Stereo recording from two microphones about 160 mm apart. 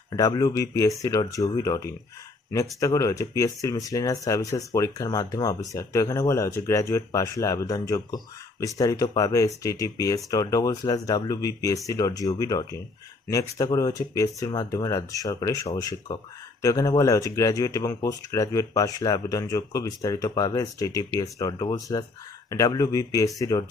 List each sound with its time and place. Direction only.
0.1 s speech: 25° left (ahead or behind)